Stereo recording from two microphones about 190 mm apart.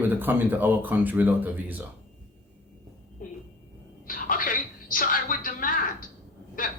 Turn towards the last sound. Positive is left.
turn(degrees=45)  # may be behind; listen again after turning